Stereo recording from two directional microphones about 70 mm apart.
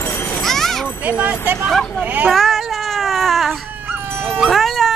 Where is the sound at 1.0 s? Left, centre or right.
Right.